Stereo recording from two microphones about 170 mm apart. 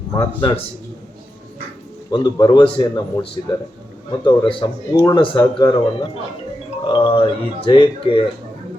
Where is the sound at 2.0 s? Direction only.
25° left (ahead or behind).